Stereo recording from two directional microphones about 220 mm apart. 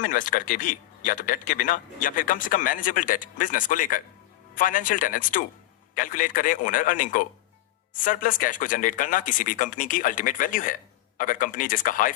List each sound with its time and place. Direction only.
0.0 s speech: 40° left (ahead or behind)